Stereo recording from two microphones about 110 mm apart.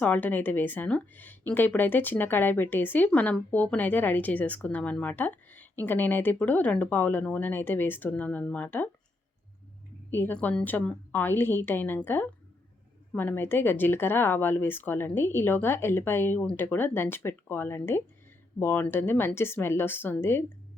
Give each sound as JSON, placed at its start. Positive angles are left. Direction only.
{"t": 0.0, "sound": "speech", "side_deg": 15}
{"t": 10.1, "sound": "speech", "side_deg": 20}